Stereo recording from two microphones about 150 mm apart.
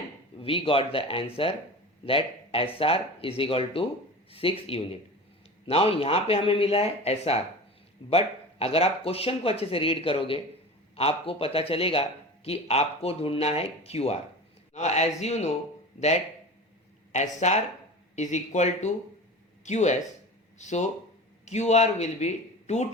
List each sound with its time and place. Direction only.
0.4 s speech: 35° left (ahead or behind)
17.4 s speech: 50° left (ahead or behind)